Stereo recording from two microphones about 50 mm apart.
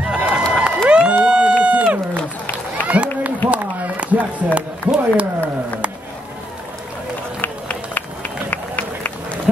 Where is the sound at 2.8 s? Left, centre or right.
Left.